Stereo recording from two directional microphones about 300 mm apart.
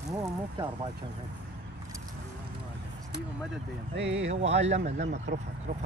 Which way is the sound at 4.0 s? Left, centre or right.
Right.